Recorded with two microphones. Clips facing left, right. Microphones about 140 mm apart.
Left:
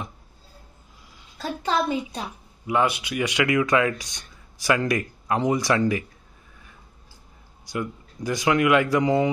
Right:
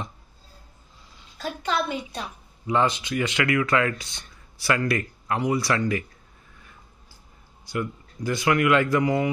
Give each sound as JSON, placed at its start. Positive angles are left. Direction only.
{"t": 1.4, "sound": "a child's voice", "side_deg": 35}
{"t": 2.6, "sound": "speech", "side_deg": 10}
{"t": 7.6, "sound": "speech", "side_deg": 15}